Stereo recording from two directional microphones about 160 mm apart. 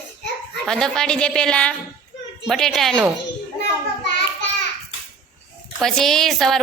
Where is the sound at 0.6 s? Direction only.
5° left (ahead or behind).